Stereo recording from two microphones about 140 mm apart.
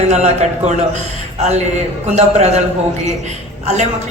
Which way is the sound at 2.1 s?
50° right (ahead or behind).